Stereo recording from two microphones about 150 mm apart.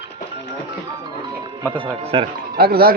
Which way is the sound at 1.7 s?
40° right (ahead or behind).